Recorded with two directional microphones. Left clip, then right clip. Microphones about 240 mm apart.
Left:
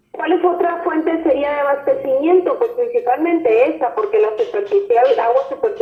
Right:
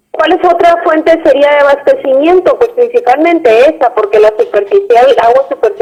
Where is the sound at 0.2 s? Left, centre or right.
Right.